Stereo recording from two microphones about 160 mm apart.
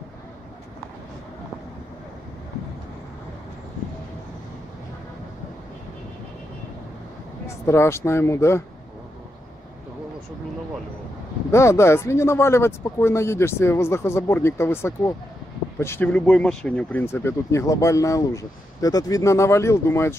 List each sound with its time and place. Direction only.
7.4 s speech: 15° left (ahead or behind)
11.5 s speech: 15° left (ahead or behind)